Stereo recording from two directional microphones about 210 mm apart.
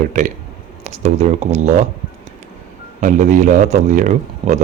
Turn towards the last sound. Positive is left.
turn(degrees=-35)  # may be behind; listen again after turning